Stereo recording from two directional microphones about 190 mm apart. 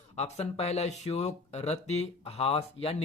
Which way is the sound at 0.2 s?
35° left (ahead or behind).